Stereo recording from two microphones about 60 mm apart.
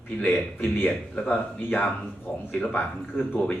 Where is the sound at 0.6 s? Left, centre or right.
Left.